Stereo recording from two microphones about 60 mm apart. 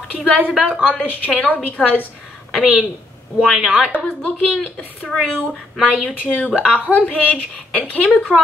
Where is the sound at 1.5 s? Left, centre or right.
Left.